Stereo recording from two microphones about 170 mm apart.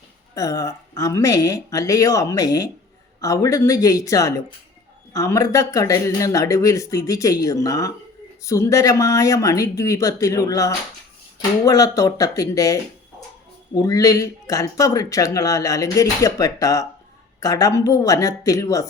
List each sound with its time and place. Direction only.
0.3 s speech: 20° left (ahead or behind)